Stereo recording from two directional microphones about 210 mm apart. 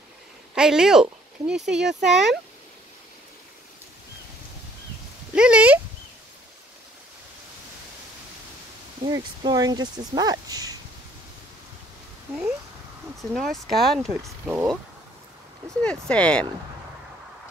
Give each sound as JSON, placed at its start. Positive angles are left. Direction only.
{"t": 0.6, "sound": "speech", "side_deg": -5}
{"t": 5.3, "sound": "speech", "side_deg": -5}
{"t": 9.0, "sound": "speech", "side_deg": -20}
{"t": 12.3, "sound": "speech", "side_deg": -5}
{"t": 15.8, "sound": "speech", "side_deg": 5}